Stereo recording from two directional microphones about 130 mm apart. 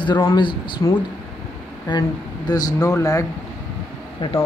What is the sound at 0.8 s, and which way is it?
A man's voice, 30° left (ahead or behind).